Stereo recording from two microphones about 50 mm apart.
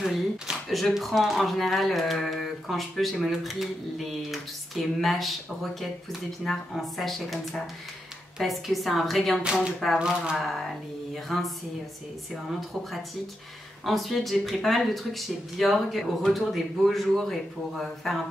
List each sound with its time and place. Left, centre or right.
0.0 s speech: centre
9.9 s speech: centre
10.4 s speech: centre